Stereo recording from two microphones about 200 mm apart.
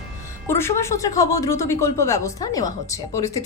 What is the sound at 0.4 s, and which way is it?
A woman's voice, 10° left (ahead or behind).